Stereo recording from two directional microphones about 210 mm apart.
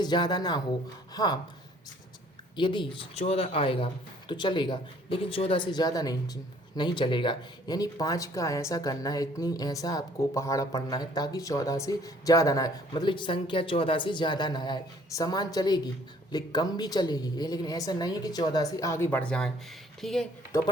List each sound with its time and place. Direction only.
0.0 s speech: 20° left (ahead or behind)
2.6 s speech: 20° left (ahead or behind); by 20.2 s centre (ahead or behind)
20.5 s speech: 15° left (ahead or behind)